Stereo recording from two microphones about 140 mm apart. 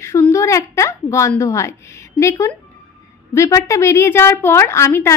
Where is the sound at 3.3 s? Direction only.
20° left (ahead or behind).